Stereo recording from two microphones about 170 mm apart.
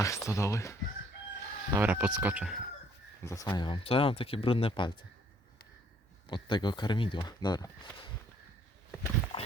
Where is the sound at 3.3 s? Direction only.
20° left (ahead or behind).